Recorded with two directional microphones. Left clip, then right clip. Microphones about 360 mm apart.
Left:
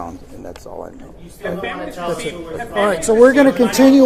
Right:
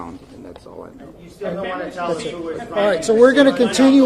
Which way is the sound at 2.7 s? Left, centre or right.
Left.